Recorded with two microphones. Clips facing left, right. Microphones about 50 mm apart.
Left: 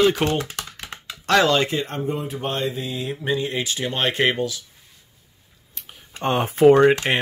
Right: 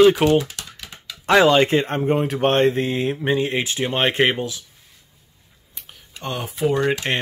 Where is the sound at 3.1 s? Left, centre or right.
Right.